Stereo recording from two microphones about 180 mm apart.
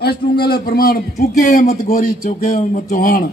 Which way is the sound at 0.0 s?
60° left (ahead or behind).